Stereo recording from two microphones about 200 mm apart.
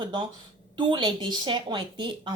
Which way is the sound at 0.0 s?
25° right (ahead or behind).